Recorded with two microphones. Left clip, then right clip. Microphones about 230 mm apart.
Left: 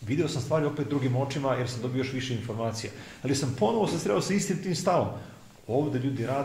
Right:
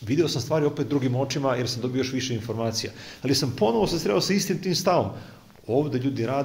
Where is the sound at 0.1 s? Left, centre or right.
Right.